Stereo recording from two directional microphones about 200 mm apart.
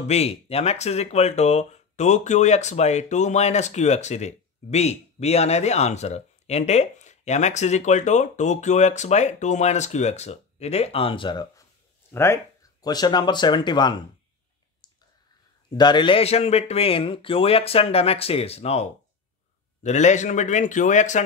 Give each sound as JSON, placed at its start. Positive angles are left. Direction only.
{"t": 0.0, "sound": "speech", "side_deg": 30}
{"t": 15.7, "sound": "speech", "side_deg": 20}